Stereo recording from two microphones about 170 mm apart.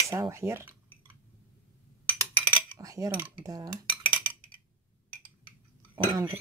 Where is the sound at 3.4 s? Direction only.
20° right (ahead or behind).